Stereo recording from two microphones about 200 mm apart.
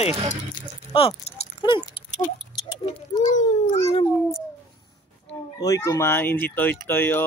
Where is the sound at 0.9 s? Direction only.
25° left (ahead or behind).